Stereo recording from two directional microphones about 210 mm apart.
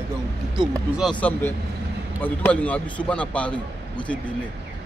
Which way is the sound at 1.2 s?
10° left (ahead or behind).